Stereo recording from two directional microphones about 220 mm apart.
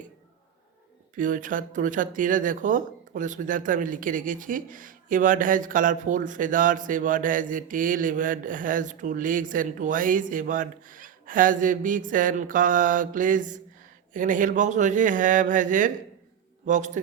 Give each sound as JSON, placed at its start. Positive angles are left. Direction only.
{"t": 1.1, "sound": "speech", "side_deg": -35}